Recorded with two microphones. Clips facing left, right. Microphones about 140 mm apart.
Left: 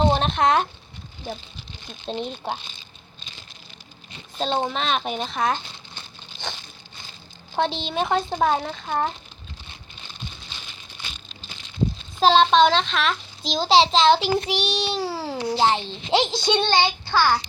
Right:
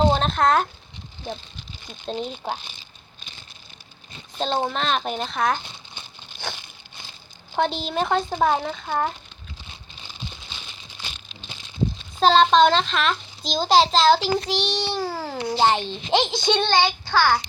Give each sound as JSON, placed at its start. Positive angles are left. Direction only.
{"t": 0.0, "sound": "speech", "side_deg": 5}
{"t": 1.9, "sound": "a child's voice", "side_deg": 0}
{"t": 4.4, "sound": "a child's voice", "side_deg": -5}
{"t": 5.9, "sound": "crumpling", "side_deg": -10}
{"t": 7.5, "sound": "a child's voice", "side_deg": 0}
{"t": 12.2, "sound": "a child's voice", "side_deg": 0}
{"t": 14.3, "sound": "a child's voice", "side_deg": 10}
{"t": 15.8, "sound": "speech", "side_deg": -20}
{"t": 16.5, "sound": "a child's voice", "side_deg": 5}